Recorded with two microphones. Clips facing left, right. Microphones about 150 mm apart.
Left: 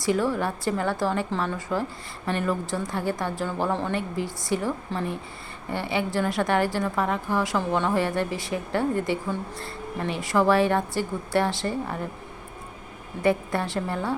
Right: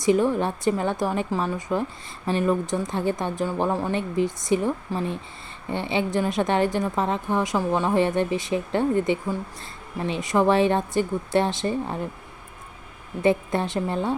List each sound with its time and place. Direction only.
0.0 s a woman's voice: 20° right (ahead or behind)
13.2 s a woman's voice: 20° right (ahead or behind)